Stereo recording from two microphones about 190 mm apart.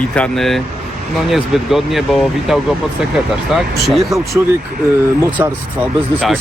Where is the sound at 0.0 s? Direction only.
5° left (ahead or behind).